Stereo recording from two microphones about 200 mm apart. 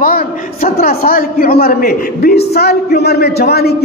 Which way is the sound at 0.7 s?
45° left (ahead or behind).